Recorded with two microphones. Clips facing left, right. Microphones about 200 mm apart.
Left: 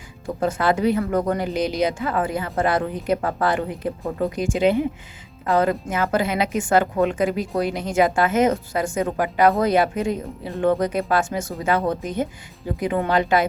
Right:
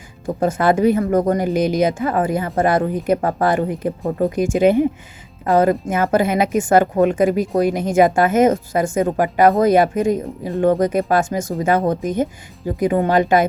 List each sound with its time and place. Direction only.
0.3 s a woman's voice: 45° right (ahead or behind)
3.2 s speech: 35° right (ahead or behind)
3.7 s a woman's voice: 45° right (ahead or behind)